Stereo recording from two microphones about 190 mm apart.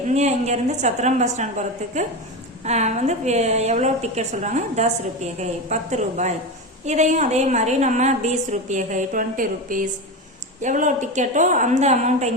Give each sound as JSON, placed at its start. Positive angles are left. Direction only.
{"t": 0.1, "sound": "a woman's voice", "side_deg": -35}